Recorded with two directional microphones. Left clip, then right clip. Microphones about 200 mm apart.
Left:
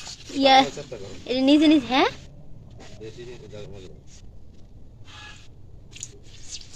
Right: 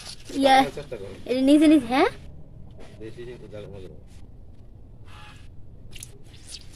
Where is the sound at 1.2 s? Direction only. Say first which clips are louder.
Even; 10° right (ahead or behind).